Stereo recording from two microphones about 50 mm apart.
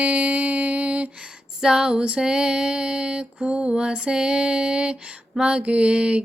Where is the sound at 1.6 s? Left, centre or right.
Centre.